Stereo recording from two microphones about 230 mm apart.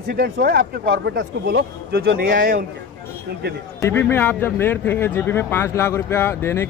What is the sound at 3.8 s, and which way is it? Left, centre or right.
Speech, centre.